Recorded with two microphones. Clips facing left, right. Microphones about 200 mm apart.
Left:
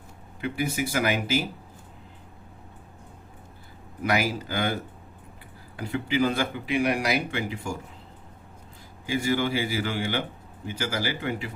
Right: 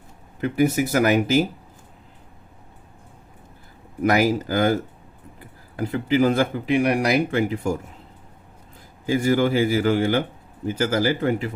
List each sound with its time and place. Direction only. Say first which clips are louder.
0.4 s speech: right 8 dB; 45° right (ahead or behind)
4.0 s speech: right 7 dB; 45° right (ahead or behind)
9.0 s speech: right 6 dB; 50° right (ahead or behind)